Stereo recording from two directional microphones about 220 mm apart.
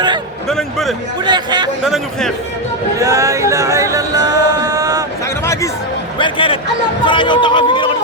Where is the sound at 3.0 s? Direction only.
15° right (ahead or behind).